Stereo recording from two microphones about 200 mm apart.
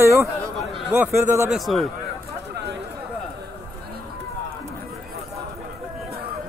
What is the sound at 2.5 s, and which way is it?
Chatter, 60° right (ahead or behind).